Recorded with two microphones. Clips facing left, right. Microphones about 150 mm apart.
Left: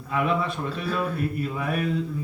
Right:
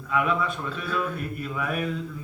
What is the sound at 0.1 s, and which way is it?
Speech, 35° left (ahead or behind).